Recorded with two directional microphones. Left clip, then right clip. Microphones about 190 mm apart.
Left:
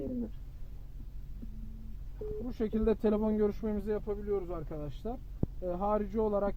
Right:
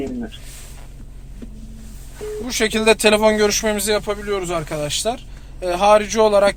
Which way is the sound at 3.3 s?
25° left (ahead or behind).